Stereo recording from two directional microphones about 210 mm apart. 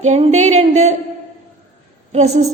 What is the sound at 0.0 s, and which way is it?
Speech, 35° right (ahead or behind).